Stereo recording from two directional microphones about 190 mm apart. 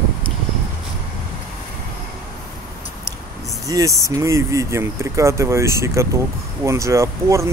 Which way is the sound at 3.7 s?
20° right (ahead or behind).